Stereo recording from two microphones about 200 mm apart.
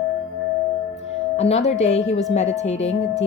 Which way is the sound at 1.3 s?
35° left (ahead or behind).